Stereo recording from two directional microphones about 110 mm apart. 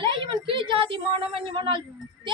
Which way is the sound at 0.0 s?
50° right (ahead or behind).